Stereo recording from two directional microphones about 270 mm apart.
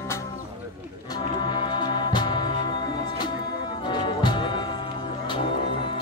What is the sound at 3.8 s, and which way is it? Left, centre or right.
Music, centre.